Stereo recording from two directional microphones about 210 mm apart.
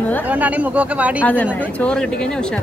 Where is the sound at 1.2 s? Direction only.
10° left (ahead or behind).